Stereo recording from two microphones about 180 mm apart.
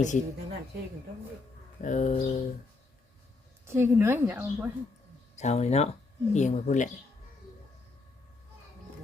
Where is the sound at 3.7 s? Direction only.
15° right (ahead or behind).